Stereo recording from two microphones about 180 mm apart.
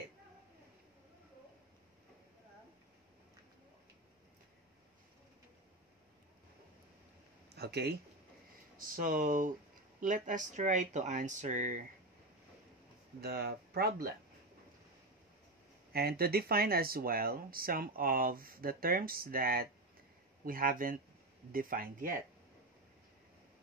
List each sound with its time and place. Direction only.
7.5 s speech: 65° right (ahead or behind)
8.7 s speech: 50° right (ahead or behind)
13.2 s speech: 60° right (ahead or behind)
15.9 s speech: 60° right (ahead or behind)